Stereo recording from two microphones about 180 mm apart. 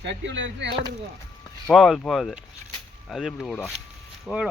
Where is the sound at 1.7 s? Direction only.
Centre (ahead or behind).